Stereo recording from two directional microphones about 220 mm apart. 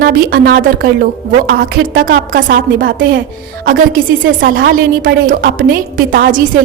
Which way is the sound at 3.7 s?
40° right (ahead or behind).